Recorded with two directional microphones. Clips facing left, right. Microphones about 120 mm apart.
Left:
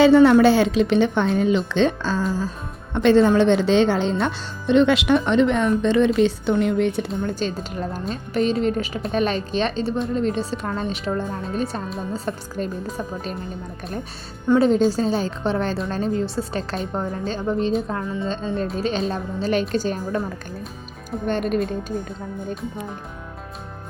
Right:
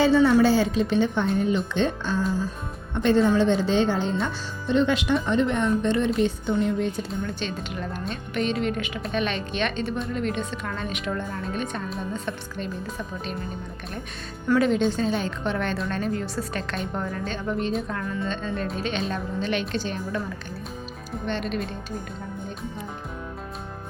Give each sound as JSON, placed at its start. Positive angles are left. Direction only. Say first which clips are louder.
{"t": 0.0, "sound": "a woman's voice", "louder": "left 6 dB", "side_deg": 65}
{"t": 7.3, "sound": "speech", "louder": "left 5 dB", "side_deg": 40}
{"t": 14.4, "sound": "speech", "louder": "left 4 dB", "side_deg": 25}
{"t": 14.8, "sound": "speech", "louder": "left 4 dB", "side_deg": 35}
{"t": 21.2, "sound": "speech", "louder": "left 6 dB", "side_deg": 45}